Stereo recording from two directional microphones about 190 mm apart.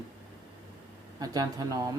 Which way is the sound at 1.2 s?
20° right (ahead or behind).